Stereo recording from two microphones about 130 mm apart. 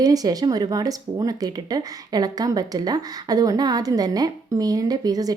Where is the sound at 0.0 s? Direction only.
30° right (ahead or behind).